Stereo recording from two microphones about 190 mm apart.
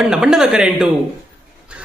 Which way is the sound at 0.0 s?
5° right (ahead or behind).